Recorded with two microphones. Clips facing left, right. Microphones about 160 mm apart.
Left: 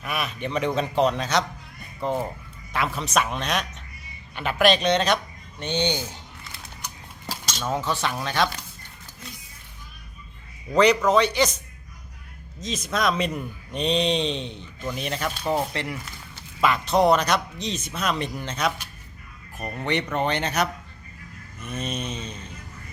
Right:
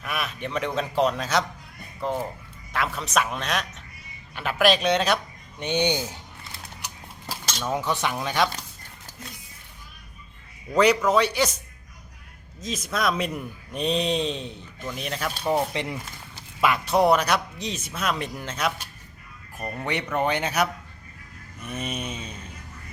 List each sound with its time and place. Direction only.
0.0 s a man's voice: centre (ahead or behind); by 6.1 s 15° right (ahead or behind)
7.7 s a man's voice: 15° right (ahead or behind)
10.8 s a man's voice: 5° right (ahead or behind)
12.6 s a man's voice: 5° right (ahead or behind)
15.4 s a man's voice: 15° right (ahead or behind)